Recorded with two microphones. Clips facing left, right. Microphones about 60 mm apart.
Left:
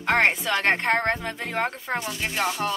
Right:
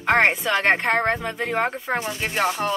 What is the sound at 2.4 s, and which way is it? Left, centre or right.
Speech, centre.